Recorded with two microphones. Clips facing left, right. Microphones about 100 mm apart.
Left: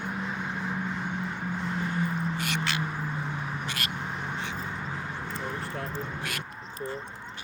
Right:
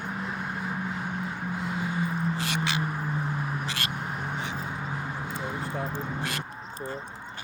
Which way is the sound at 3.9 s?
5° right (ahead or behind).